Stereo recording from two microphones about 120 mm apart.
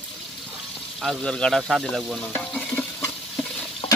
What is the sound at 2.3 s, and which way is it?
Stir, 10° left (ahead or behind).